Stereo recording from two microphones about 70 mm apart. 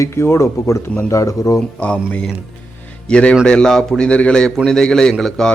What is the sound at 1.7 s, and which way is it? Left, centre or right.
A man's voice, centre.